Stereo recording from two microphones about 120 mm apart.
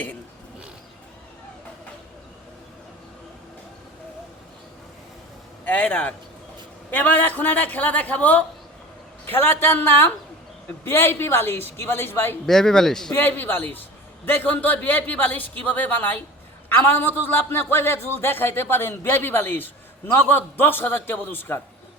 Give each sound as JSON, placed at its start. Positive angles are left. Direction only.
{"t": 5.6, "sound": "a man's voice", "side_deg": 15}
{"t": 12.5, "sound": "speech", "side_deg": 5}
{"t": 13.1, "sound": "a man's voice", "side_deg": 15}